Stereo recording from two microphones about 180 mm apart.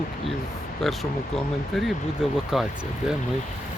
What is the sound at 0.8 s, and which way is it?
Speech, centre (ahead or behind).